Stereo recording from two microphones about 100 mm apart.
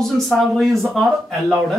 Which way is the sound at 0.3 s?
Centre (ahead or behind).